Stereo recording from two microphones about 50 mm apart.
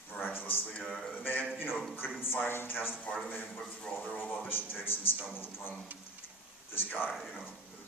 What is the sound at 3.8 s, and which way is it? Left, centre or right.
Speech, left.